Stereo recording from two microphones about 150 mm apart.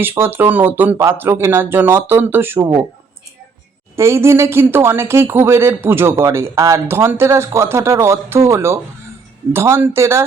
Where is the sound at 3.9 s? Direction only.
15° right (ahead or behind).